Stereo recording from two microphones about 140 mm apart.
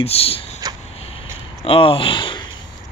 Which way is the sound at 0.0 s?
45° left (ahead or behind).